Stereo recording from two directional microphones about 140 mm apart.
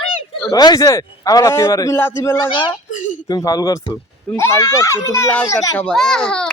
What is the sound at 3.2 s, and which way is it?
A man's voice, 25° left (ahead or behind).